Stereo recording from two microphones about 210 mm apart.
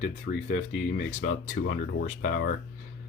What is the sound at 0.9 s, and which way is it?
Speech, 35° left (ahead or behind).